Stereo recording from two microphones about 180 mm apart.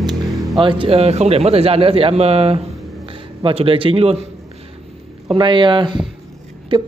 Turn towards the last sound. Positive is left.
turn(degrees=-25)  # may be behind; listen again after turning